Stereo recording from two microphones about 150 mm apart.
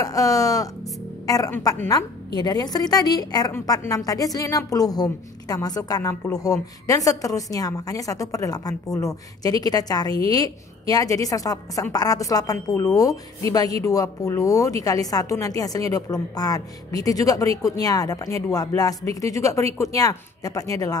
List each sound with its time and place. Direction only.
0.0 s a woman's voice: 25° left (ahead or behind)